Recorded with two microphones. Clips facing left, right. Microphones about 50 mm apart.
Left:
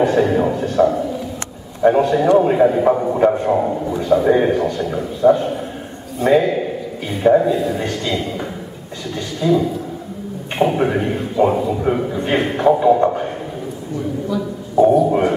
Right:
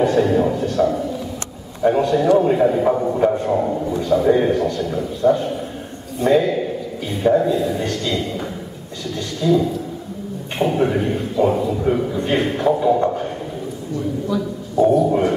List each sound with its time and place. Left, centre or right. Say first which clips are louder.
0.0 s a man's voice: left 1 dB; centre
14.8 s a man's voice: left 2 dB; centre